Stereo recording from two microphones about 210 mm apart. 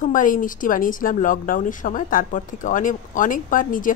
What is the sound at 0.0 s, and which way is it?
Speech, 40° left (ahead or behind).